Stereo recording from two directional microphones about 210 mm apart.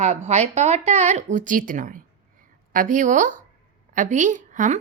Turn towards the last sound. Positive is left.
turn(degrees=-35)  # may be behind; listen again after turning